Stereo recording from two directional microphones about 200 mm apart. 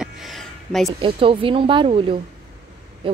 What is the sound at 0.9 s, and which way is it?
A woman's voice, 25° right (ahead or behind).